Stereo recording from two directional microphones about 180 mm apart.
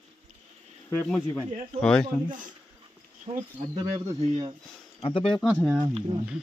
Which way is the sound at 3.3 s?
20° right (ahead or behind).